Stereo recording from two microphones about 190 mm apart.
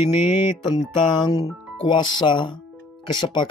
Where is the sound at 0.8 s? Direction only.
20° left (ahead or behind).